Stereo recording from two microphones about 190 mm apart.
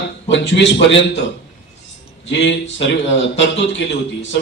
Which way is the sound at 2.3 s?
70° left (ahead or behind).